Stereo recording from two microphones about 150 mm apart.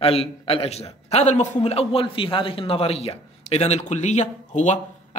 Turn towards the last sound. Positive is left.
turn(degrees=55)  # may be behind; listen again after turning